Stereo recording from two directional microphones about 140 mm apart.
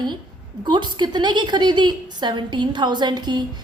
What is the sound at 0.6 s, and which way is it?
A woman's voice, 35° right (ahead or behind).